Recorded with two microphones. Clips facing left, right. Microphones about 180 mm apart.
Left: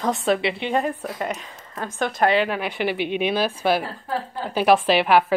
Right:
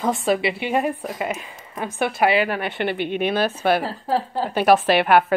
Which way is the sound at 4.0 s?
30° right (ahead or behind).